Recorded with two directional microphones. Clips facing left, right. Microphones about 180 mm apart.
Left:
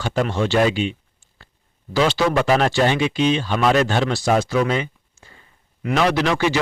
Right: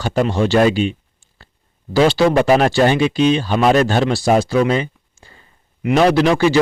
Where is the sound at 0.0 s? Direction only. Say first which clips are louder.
Right 4 dB; 35° right (ahead or behind).